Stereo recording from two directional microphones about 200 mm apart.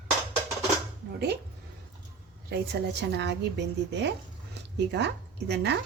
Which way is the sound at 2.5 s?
55° right (ahead or behind).